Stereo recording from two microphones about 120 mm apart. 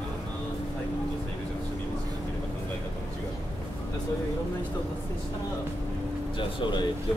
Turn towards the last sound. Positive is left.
turn(degrees=40)  # may be behind; listen again after turning